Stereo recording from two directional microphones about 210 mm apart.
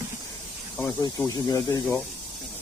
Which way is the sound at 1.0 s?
15° left (ahead or behind).